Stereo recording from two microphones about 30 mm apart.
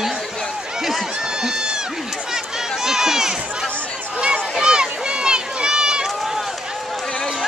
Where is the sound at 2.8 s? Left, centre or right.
Centre.